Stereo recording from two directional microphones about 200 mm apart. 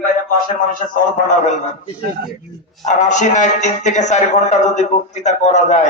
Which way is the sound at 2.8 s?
40° left (ahead or behind).